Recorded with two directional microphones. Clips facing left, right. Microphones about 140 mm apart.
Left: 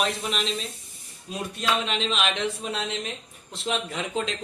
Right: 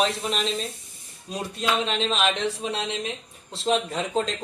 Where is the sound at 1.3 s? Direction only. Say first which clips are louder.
Right 1 dB; 35° right (ahead or behind).